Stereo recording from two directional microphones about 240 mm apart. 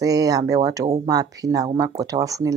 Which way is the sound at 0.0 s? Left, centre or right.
Centre.